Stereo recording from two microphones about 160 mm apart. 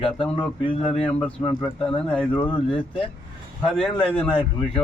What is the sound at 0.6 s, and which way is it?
Speech, 35° left (ahead or behind).